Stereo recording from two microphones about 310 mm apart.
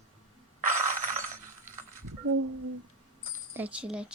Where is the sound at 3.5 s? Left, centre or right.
Centre.